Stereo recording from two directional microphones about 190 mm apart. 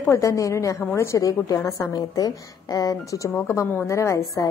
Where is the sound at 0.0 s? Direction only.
15° left (ahead or behind).